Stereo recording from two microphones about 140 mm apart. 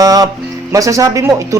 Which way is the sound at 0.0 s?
25° right (ahead or behind).